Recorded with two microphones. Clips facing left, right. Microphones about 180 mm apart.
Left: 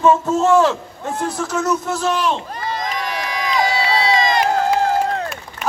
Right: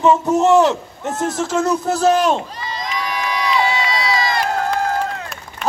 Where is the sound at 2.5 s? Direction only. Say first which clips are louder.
Left 3 dB; 55° left (ahead or behind).